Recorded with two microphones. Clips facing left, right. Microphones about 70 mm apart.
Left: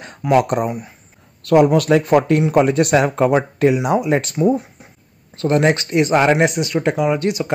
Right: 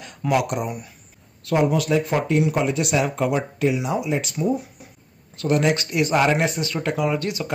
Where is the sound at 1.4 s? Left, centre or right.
Left.